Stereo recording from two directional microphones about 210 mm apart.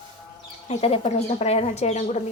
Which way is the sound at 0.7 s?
30° left (ahead or behind).